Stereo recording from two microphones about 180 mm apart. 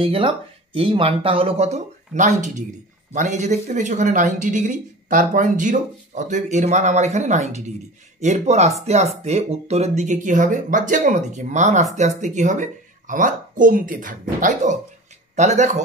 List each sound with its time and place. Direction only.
0.0 s speech: 30° right (ahead or behind)